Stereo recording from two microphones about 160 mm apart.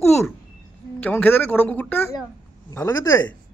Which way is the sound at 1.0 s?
10° left (ahead or behind).